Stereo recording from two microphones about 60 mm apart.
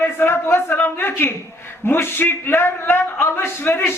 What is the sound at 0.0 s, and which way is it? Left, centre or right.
A man's voice, left.